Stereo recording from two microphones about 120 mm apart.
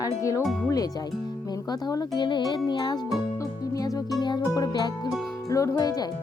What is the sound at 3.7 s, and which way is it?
Music, 30° left (ahead or behind).